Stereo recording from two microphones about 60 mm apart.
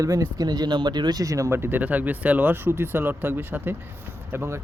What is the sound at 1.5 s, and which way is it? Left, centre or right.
Speech, right.